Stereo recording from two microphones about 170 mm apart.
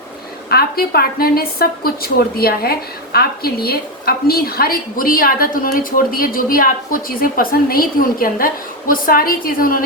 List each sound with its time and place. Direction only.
0.5 s a woman's voice: 65° left (ahead or behind)